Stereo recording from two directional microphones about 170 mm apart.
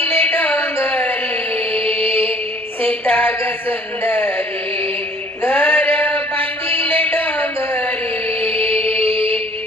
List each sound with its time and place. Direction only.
0.1 s music: 10° left (ahead or behind)
1.7 s music: 35° right (ahead or behind)
2.9 s music: 10° left (ahead or behind)
4.0 s a sound: 10° left (ahead or behind)
5.4 s mantra: 10° left (ahead or behind)
8.4 s music: 35° right (ahead or behind)